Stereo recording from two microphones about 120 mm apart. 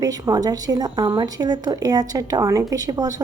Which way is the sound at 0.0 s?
30° right (ahead or behind).